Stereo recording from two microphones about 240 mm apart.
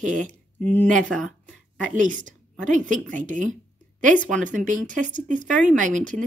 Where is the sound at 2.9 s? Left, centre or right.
Right.